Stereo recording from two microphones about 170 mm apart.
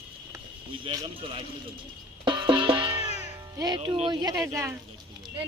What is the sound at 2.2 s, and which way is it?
Music, 30° right (ahead or behind).